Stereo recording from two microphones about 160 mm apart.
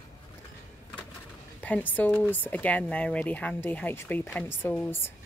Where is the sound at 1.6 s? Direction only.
10° left (ahead or behind).